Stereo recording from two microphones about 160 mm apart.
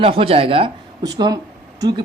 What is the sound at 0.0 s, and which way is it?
Speech, 35° right (ahead or behind).